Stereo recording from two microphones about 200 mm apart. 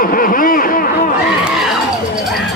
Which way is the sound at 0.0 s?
45° left (ahead or behind).